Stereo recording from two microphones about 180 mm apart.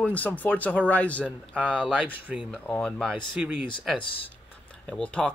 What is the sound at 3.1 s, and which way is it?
Speech, 5° right (ahead or behind).